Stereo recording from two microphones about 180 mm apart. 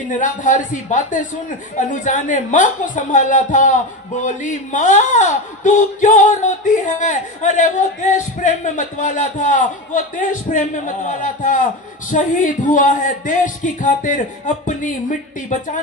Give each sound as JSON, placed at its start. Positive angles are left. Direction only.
{"t": 0.2, "sound": "a woman's voice", "side_deg": 45}